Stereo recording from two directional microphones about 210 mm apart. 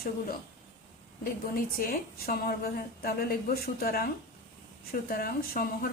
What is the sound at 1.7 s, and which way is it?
Speech, 45° left (ahead or behind).